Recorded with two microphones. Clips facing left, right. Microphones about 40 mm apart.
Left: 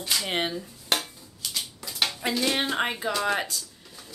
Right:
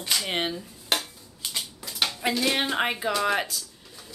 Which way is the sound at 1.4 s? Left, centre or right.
Right.